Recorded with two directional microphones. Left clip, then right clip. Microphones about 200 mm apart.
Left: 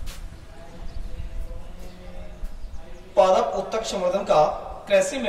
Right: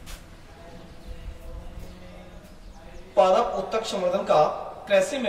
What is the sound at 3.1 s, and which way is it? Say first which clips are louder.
A man's voice: left 1 dB; 5° right (ahead or behind).